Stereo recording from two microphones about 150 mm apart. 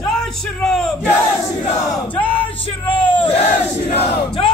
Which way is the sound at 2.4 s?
35° left (ahead or behind).